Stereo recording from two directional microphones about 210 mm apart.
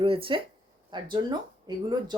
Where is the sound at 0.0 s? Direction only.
25° right (ahead or behind).